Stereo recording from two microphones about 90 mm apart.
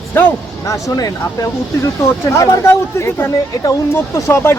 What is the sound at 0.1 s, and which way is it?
Speech, 20° left (ahead or behind).